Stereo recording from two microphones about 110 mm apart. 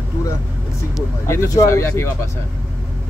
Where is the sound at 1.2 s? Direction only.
25° left (ahead or behind).